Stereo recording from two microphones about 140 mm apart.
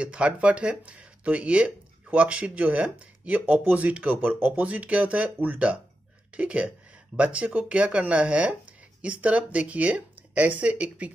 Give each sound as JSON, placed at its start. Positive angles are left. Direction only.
{"t": 0.0, "sound": "speech", "side_deg": -10}